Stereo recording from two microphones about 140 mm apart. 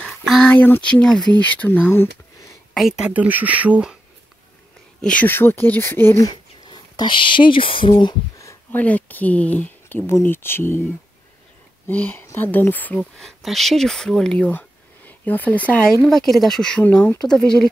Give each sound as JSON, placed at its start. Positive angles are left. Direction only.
{"t": 0.0, "sound": "speech", "side_deg": 5}
{"t": 2.7, "sound": "speech", "side_deg": -5}
{"t": 5.0, "sound": "speech", "side_deg": 10}
{"t": 6.3, "sound": "speech", "side_deg": 30}
{"t": 8.7, "sound": "speech", "side_deg": 10}
{"t": 11.9, "sound": "speech", "side_deg": 15}
{"t": 13.2, "sound": "speech", "side_deg": 0}